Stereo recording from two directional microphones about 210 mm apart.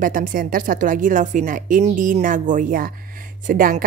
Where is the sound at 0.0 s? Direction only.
40° right (ahead or behind).